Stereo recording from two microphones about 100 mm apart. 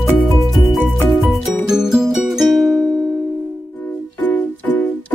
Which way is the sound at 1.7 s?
5° right (ahead or behind).